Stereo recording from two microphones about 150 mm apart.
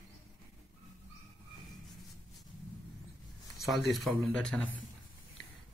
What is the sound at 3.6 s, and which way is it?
Speech, centre (ahead or behind).